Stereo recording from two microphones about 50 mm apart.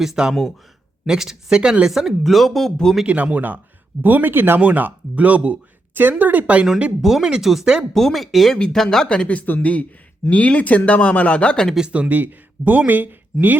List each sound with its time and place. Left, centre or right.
0.0 s speech: centre
3.1 s speech: right
4.6 s speech: right
5.9 s speech: right
7.0 s speech: centre
7.9 s speech: centre
9.0 s speech: left
11.9 s speech: right